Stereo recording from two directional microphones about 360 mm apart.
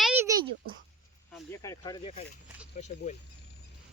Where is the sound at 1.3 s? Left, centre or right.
Centre.